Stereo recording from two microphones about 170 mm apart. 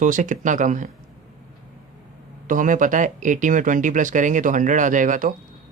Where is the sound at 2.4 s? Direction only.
50° right (ahead or behind).